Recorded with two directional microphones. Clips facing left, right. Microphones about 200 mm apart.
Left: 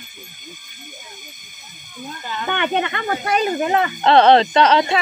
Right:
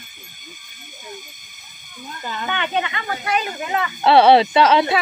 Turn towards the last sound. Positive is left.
turn(degrees=-5)  # may be behind; listen again after turning